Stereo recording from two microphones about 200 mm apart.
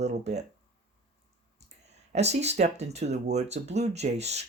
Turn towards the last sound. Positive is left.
turn(degrees=-35)  # may be behind; listen again after turning